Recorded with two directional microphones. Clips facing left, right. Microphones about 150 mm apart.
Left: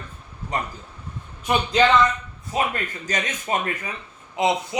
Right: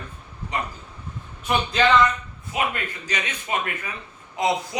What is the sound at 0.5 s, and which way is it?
Speech, 45° left (ahead or behind).